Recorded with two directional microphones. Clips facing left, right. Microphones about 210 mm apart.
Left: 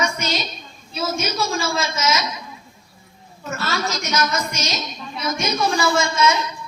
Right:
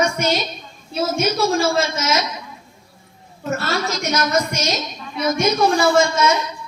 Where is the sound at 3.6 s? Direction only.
55° right (ahead or behind).